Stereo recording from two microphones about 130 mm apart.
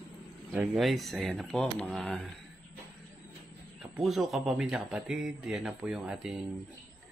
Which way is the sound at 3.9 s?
Centre (ahead or behind).